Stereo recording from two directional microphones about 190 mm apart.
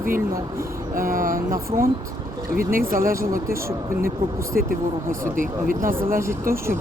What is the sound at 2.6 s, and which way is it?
Speech, 50° right (ahead or behind).